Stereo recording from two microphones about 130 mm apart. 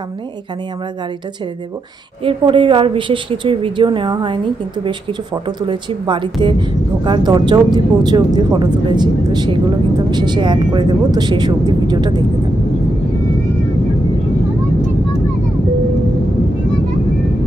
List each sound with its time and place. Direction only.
2.2 s speech: 40° right (ahead or behind)